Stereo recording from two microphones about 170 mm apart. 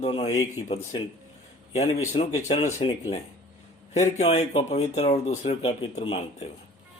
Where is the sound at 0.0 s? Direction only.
35° left (ahead or behind).